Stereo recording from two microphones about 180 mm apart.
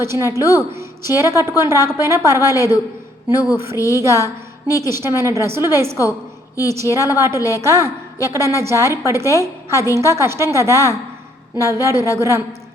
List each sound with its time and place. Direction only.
0.0 s a woman's voice: 15° right (ahead or behind)
7.2 s a woman's voice: 15° right (ahead or behind)